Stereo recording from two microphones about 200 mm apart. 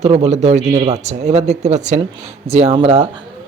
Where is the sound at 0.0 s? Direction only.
30° right (ahead or behind).